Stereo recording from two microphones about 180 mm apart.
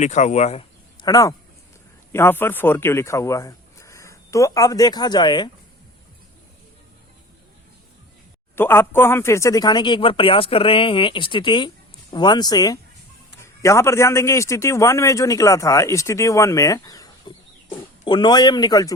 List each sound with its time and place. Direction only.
0.0 s speech: 40° left (ahead or behind)
1.0 s speech: 20° left (ahead or behind)
8.5 s a man's voice: 10° left (ahead or behind)